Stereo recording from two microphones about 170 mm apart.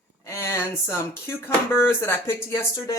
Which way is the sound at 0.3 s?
15° left (ahead or behind).